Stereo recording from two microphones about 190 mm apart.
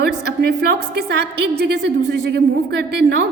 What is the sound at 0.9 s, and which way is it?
A woman's voice, 60° right (ahead or behind).